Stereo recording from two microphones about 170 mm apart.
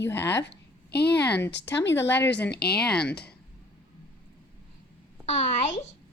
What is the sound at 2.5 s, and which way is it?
Speech, 70° left (ahead or behind).